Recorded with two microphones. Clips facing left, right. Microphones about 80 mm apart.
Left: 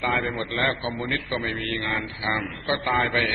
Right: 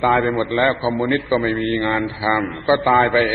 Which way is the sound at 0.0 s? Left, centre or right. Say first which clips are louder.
Right 9 dB; right.